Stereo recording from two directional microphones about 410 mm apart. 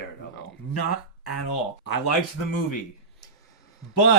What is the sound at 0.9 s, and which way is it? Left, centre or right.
Speech, left.